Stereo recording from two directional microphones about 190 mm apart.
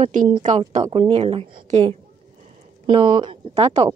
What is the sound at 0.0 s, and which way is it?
Speech, 40° right (ahead or behind).